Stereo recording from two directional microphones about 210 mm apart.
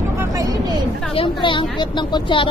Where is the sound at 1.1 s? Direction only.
25° left (ahead or behind).